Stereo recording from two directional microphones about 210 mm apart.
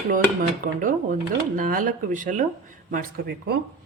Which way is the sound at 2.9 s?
50° right (ahead or behind).